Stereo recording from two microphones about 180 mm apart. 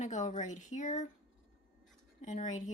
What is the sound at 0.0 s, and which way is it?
Speech, 45° left (ahead or behind).